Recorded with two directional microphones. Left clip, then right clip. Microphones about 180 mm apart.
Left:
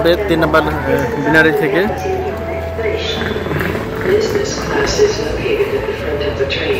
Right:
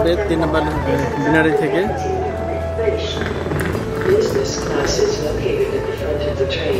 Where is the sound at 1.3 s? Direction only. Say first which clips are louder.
Left 4 dB; 15° right (ahead or behind).